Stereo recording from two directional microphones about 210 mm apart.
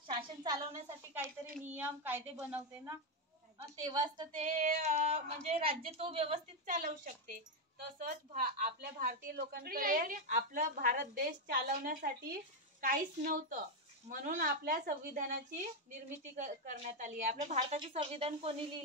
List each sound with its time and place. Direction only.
0.1 s a woman's voice: 20° right (ahead or behind)
1.8 s a woman's voice: 10° right (ahead or behind)
4.4 s a woman's voice: 40° right (ahead or behind)